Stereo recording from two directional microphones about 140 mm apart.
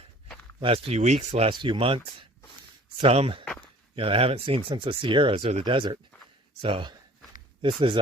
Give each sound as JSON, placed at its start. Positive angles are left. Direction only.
{"t": 0.6, "sound": "speech", "side_deg": -45}
{"t": 1.5, "sound": "speech", "side_deg": -35}
{"t": 3.0, "sound": "speech", "side_deg": -45}
{"t": 3.4, "sound": "a sound", "side_deg": 5}
{"t": 3.9, "sound": "speech", "side_deg": -40}